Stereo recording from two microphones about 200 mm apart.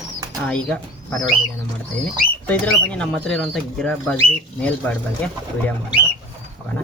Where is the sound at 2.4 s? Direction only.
5° left (ahead or behind).